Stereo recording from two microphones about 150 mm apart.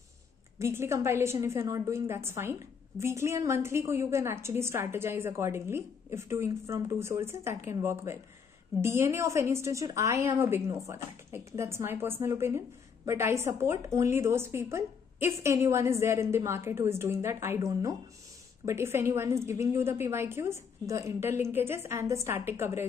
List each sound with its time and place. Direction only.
0.6 s a woman's voice: 20° right (ahead or behind)